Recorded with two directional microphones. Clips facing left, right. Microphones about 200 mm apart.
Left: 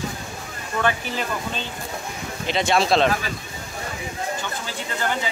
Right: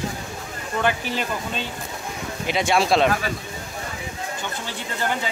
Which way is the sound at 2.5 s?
10° right (ahead or behind).